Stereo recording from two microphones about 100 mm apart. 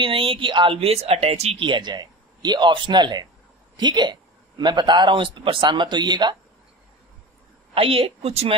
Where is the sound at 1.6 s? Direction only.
50° right (ahead or behind).